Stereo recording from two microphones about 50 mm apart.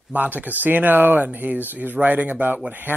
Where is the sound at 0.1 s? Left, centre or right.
Right.